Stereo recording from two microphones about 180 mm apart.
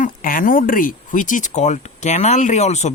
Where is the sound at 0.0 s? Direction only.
50° left (ahead or behind).